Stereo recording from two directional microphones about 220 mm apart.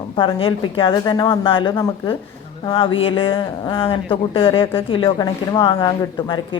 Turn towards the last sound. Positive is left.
turn(degrees=20)  # may be behind; listen again after turning